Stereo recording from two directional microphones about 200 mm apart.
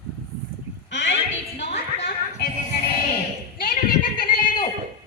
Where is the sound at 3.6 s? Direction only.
45° left (ahead or behind).